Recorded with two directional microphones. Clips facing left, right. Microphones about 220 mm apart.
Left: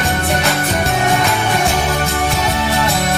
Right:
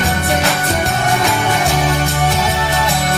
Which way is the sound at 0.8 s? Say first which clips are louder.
Left 2 dB; centre (ahead or behind).